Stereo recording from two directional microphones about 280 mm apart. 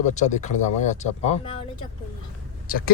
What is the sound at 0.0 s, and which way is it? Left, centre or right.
Speech, left.